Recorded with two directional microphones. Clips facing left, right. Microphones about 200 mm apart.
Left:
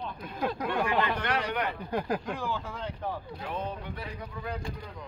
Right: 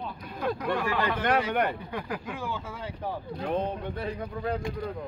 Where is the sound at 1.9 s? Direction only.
40° left (ahead or behind).